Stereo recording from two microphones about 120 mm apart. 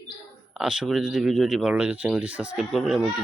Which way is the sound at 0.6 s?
5° right (ahead or behind).